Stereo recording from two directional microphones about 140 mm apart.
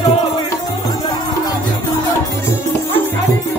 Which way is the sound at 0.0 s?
30° left (ahead or behind).